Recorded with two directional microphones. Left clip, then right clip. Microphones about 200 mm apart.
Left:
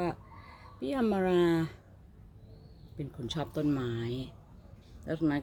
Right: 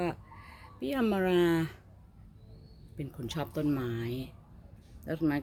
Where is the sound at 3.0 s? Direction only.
Centre (ahead or behind).